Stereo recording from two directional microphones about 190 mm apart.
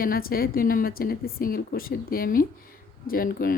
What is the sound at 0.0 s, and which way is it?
A woman's voice, 50° left (ahead or behind).